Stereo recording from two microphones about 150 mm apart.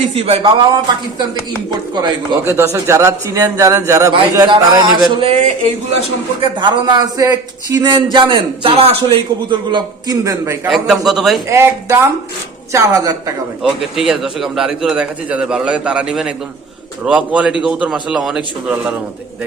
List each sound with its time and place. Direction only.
0.1 s speech: 40° right (ahead or behind)
1.7 s speech: 30° right (ahead or behind)
2.4 s speech: 15° right (ahead or behind)
6.4 s speech: 30° right (ahead or behind)
10.7 s a man's voice: centre (ahead or behind)
11.4 s a man's voice: 20° right (ahead or behind)
13.6 s a man's voice: 5° right (ahead or behind)